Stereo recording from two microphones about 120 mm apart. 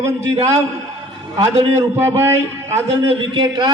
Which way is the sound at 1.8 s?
20° right (ahead or behind).